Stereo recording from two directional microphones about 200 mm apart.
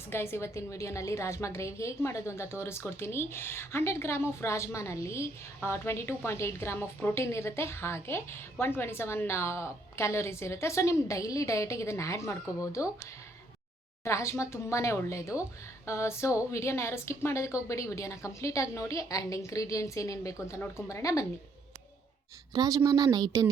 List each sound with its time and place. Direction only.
0.1 s a woman's voice: 10° left (ahead or behind)
14.0 s a woman's voice: 15° left (ahead or behind)
22.5 s speech: 20° right (ahead or behind)